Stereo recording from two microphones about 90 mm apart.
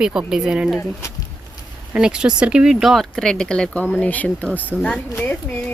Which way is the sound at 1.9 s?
10° right (ahead or behind).